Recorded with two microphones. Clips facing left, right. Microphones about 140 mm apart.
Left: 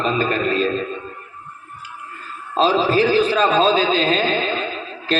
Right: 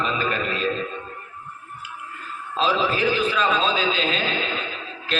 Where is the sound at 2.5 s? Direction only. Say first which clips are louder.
Left 6 dB; 40° left (ahead or behind).